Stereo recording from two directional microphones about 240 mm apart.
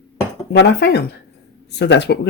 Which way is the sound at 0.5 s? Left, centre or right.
Left.